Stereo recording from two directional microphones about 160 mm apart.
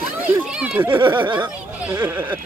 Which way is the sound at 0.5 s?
5° right (ahead or behind).